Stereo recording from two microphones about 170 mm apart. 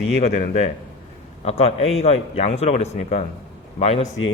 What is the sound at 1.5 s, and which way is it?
Speech, 40° left (ahead or behind).